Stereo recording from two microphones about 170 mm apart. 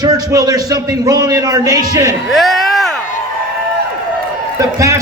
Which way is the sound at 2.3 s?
Centre (ahead or behind).